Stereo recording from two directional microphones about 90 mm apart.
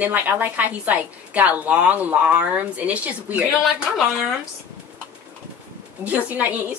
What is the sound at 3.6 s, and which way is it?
Speech, 5° right (ahead or behind).